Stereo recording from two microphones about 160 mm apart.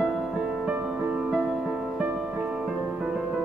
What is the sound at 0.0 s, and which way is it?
Music, 5° right (ahead or behind).